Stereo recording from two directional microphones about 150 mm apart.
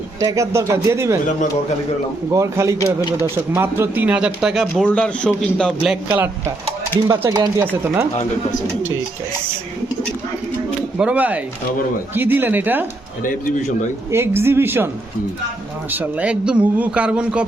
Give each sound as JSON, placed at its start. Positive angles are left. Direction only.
{"t": 0.2, "sound": "speech", "side_deg": -20}
{"t": 2.3, "sound": "a man's voice", "side_deg": -20}
{"t": 4.7, "sound": "a man's voice", "side_deg": 10}
{"t": 6.1, "sound": "a man's voice", "side_deg": -15}
{"t": 10.9, "sound": "a man's voice", "side_deg": -10}
{"t": 13.2, "sound": "a man's voice", "side_deg": 65}
{"t": 14.1, "sound": "a man's voice", "side_deg": -15}
{"t": 15.9, "sound": "a man's voice", "side_deg": -10}